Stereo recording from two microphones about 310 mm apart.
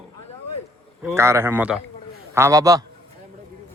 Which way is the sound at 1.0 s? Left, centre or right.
Centre.